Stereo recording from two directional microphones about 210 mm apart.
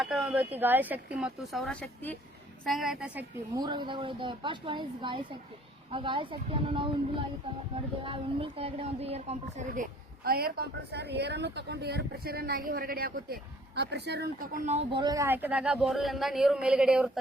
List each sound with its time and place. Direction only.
0.0 s speech: 5° right (ahead or behind)
3.5 s speech: 20° right (ahead or behind)
8.0 s speech: 25° right (ahead or behind); by 17.1 s 5° right (ahead or behind)